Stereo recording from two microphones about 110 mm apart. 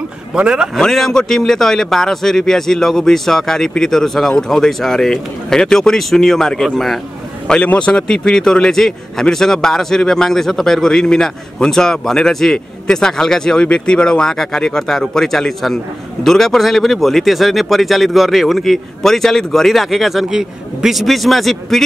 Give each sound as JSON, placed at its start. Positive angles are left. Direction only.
{"t": 0.3, "sound": "speech", "side_deg": -10}
{"t": 0.7, "sound": "a man's voice", "side_deg": 5}